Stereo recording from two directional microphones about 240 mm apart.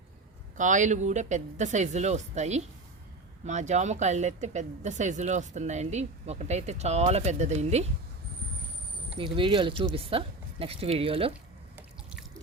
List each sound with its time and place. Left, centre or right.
0.5 s speech: right
9.1 s speech: right